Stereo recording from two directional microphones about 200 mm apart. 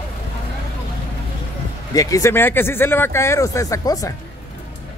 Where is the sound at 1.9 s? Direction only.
15° left (ahead or behind).